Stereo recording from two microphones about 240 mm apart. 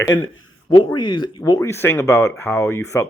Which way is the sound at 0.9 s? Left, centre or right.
Centre.